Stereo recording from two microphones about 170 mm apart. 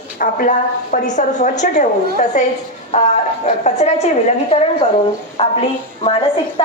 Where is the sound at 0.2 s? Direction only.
50° left (ahead or behind); by 5.5 s 35° left (ahead or behind).